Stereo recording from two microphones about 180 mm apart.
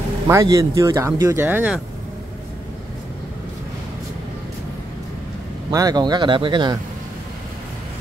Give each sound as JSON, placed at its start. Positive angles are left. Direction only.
{"t": 0.3, "sound": "speech", "side_deg": -20}
{"t": 5.7, "sound": "speech", "side_deg": -20}